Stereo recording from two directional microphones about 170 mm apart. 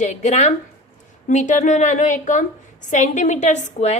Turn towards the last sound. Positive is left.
turn(degrees=40)  # may be behind; listen again after turning